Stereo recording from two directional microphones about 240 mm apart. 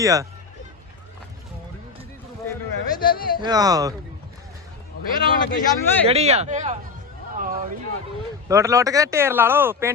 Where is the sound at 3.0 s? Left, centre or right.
Left.